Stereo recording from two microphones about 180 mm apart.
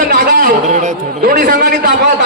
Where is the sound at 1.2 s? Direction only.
55° right (ahead or behind).